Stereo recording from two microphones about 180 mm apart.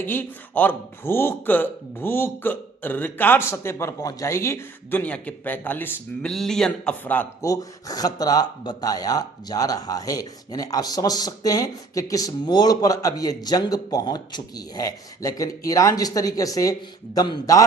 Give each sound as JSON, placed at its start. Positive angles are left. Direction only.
{"t": 0.0, "sound": "speech", "side_deg": 10}
{"t": 7.5, "sound": "speech", "side_deg": 20}